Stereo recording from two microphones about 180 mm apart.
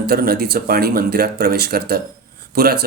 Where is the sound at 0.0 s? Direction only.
60° right (ahead or behind).